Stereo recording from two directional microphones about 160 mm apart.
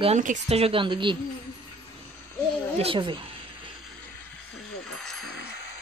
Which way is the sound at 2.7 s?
35° right (ahead or behind).